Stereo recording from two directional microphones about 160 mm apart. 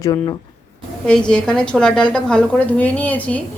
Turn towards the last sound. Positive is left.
turn(degrees=10)  # may be behind; listen again after turning